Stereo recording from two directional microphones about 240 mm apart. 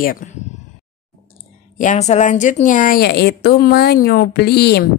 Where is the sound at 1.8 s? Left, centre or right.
Left.